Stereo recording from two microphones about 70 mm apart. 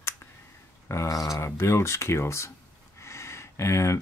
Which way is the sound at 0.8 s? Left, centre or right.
Left.